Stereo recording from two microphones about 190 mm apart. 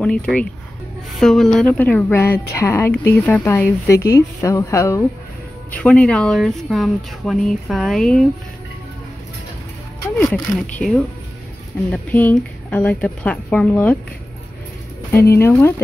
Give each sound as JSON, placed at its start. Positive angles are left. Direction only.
{"t": 0.0, "sound": "speech", "side_deg": 5}
{"t": 10.1, "sound": "speech", "side_deg": 10}
{"t": 11.9, "sound": "speech", "side_deg": 10}
{"t": 15.0, "sound": "speech", "side_deg": 10}